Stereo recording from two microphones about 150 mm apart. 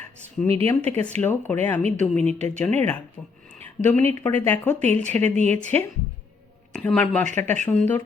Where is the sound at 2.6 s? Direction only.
10° left (ahead or behind).